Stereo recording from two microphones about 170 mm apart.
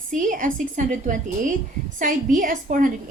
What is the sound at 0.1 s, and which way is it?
A woman's voice, 50° right (ahead or behind).